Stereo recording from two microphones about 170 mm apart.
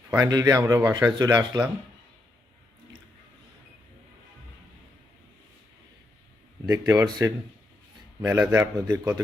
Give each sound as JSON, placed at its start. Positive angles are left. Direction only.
{"t": 0.2, "sound": "speech", "side_deg": -20}
{"t": 6.7, "sound": "a man's voice", "side_deg": -20}